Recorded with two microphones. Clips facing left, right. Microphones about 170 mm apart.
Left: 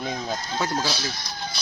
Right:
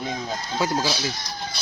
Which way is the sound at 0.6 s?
10° right (ahead or behind).